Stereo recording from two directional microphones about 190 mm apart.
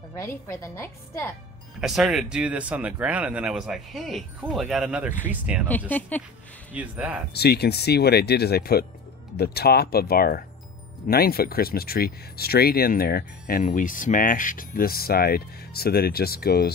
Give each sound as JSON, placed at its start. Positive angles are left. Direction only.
{"t": 0.2, "sound": "a woman's voice", "side_deg": 15}
{"t": 1.8, "sound": "speech", "side_deg": 0}
{"t": 5.7, "sound": "a woman's voice", "side_deg": 10}
{"t": 6.7, "sound": "speech", "side_deg": -10}
{"t": 7.3, "sound": "speech", "side_deg": 60}